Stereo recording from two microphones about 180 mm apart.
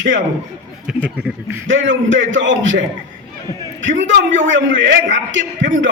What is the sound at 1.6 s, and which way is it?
A man's voice, 90° right.